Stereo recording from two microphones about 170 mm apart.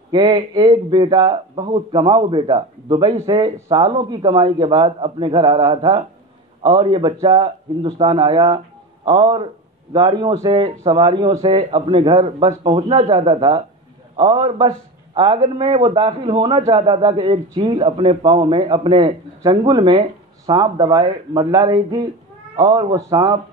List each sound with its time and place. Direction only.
0.1 s a man's voice: 25° right (ahead or behind)